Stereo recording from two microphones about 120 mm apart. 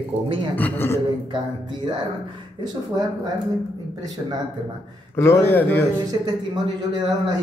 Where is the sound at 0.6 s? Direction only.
15° left (ahead or behind).